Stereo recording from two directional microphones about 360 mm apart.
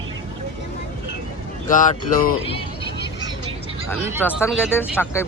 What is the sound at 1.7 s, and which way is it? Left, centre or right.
Speech, left.